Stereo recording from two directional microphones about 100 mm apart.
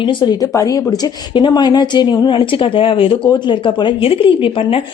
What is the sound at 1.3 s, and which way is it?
Speech, 50° left (ahead or behind).